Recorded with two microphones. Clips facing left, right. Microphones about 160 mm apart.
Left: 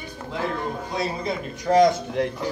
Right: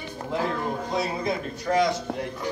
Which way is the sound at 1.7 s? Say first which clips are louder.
Left 5 dB; 25° left (ahead or behind).